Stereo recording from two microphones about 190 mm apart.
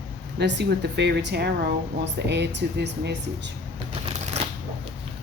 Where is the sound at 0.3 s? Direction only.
65° right (ahead or behind).